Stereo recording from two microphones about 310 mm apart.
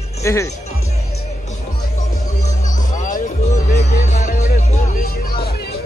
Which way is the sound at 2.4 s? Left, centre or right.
Left.